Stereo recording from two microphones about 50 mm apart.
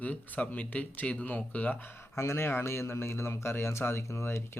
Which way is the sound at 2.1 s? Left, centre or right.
Left.